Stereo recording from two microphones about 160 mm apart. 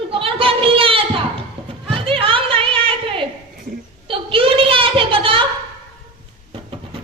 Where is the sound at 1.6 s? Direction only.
35° right (ahead or behind).